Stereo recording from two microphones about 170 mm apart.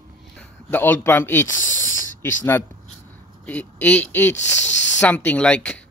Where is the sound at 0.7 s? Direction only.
10° left (ahead or behind).